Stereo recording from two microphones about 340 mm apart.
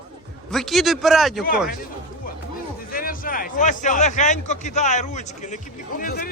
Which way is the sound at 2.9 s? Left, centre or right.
Left.